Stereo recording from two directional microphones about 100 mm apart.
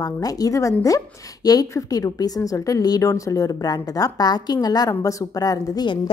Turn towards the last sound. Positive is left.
turn(degrees=45)  # may be behind; listen again after turning